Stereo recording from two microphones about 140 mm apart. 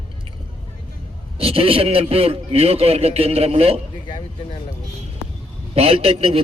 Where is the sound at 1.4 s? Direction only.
40° right (ahead or behind).